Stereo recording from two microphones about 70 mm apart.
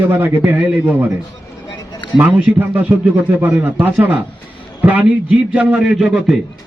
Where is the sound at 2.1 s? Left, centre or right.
Right.